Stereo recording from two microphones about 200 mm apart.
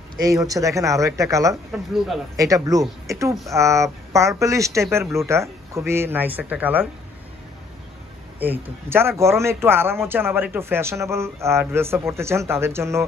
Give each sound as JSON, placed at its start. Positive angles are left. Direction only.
{"t": 0.2, "sound": "speech", "side_deg": -15}
{"t": 8.4, "sound": "speech", "side_deg": -10}